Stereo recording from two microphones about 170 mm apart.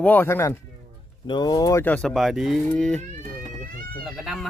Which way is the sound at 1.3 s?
25° left (ahead or behind).